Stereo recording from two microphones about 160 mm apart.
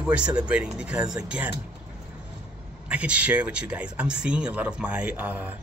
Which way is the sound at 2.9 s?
10° right (ahead or behind).